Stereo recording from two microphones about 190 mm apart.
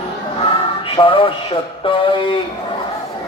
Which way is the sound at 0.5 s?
25° left (ahead or behind).